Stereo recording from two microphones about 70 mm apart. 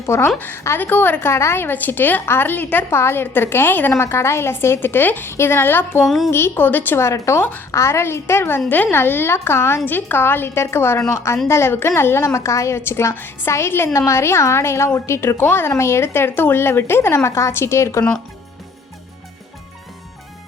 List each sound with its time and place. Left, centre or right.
0.0 s a woman's voice: left
0.3 s a woman's voice: left
1.3 s a woman's voice: left
3.9 s a woman's voice: left
6.1 s a woman's voice: centre
6.3 s a woman's voice: left
7.0 s a woman's voice: left